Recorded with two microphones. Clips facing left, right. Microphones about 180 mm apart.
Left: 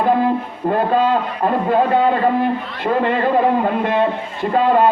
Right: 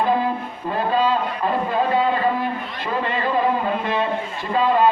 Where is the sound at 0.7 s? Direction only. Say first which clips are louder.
Left 4 dB; 55° left (ahead or behind).